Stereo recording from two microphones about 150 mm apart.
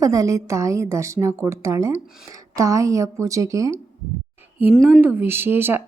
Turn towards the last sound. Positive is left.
turn(degrees=-15)  # may be behind; listen again after turning